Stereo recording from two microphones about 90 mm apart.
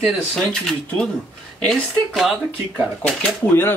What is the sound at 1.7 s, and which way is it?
Speech, centre (ahead or behind).